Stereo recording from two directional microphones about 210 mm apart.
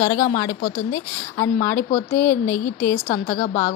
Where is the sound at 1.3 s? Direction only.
15° left (ahead or behind).